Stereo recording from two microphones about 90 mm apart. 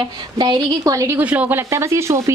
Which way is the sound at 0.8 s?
35° right (ahead or behind).